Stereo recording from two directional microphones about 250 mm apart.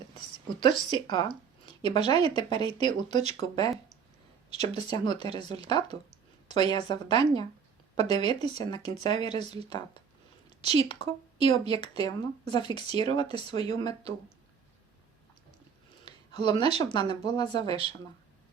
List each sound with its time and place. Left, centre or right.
0.6 s speech: centre
10.8 s speech: centre
16.0 s speech: centre